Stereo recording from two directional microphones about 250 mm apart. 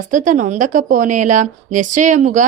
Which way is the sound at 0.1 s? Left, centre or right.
Right.